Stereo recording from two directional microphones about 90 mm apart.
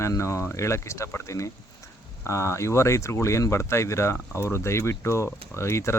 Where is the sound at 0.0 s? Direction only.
30° left (ahead or behind).